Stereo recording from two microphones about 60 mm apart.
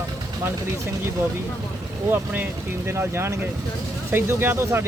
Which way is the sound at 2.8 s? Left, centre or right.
Right.